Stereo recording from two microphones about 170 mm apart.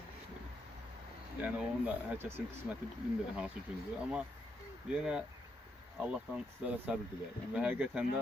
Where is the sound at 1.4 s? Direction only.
10° right (ahead or behind).